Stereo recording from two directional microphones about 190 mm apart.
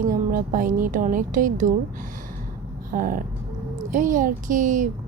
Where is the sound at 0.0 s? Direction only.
45° right (ahead or behind).